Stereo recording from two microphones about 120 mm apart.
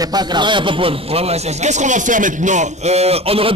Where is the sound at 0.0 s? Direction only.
35° right (ahead or behind).